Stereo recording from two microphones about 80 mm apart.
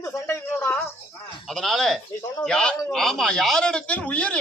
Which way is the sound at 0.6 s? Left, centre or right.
Centre.